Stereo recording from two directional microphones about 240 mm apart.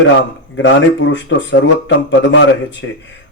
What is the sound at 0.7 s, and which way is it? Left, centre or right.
Speech, left.